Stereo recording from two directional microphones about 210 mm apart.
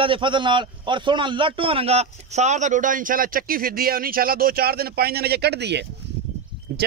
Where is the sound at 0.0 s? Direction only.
25° right (ahead or behind).